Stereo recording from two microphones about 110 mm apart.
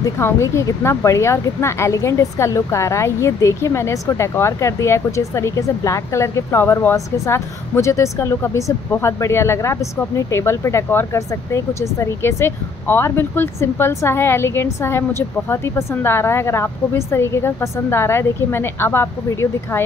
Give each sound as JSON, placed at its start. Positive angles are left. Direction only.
{"t": 0.0, "sound": "speech", "side_deg": 25}